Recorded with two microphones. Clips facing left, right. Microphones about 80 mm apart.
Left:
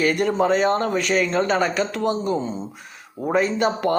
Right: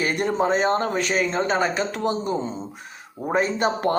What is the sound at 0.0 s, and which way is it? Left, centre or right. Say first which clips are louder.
Speech: left 3 dB; right.